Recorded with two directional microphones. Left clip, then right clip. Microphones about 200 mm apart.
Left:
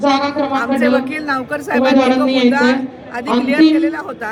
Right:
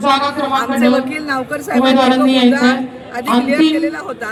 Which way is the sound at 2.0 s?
50° left (ahead or behind).